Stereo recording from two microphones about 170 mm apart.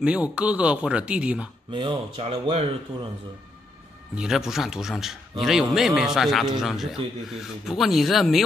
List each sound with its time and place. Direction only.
0.0 s speech: 5° right (ahead or behind)
1.7 s speech: 30° right (ahead or behind)
4.1 s speech: 5° right (ahead or behind)